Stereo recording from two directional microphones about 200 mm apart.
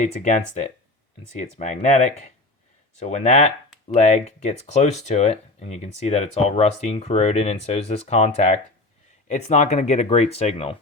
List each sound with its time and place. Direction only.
0.0 s speech: 35° left (ahead or behind)